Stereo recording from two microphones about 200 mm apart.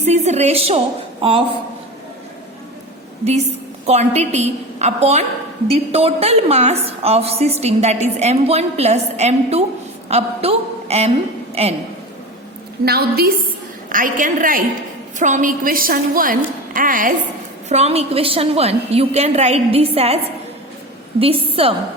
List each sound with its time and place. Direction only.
0.0 s a woman's voice: 35° right (ahead or behind)
3.8 s a woman's voice: 35° right (ahead or behind)
12.8 s a woman's voice: 50° right (ahead or behind)
17.7 s a woman's voice: 30° right (ahead or behind)
21.2 s a woman's voice: 30° right (ahead or behind)